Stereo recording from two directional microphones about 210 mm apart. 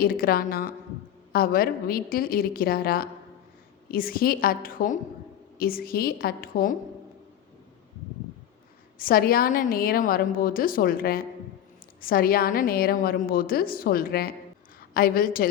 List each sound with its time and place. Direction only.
0.0 s a woman's voice: 45° left (ahead or behind)
9.0 s a woman's voice: 45° left (ahead or behind)